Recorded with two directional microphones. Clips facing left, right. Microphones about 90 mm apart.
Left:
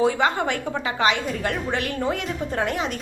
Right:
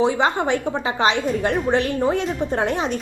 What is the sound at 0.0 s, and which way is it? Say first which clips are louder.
A woman's voice: right 2 dB; 20° right (ahead or behind).